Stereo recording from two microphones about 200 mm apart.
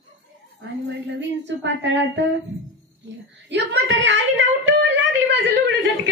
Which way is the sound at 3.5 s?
60° right (ahead or behind).